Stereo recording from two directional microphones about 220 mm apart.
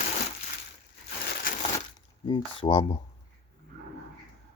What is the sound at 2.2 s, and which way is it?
Speech, 25° left (ahead or behind).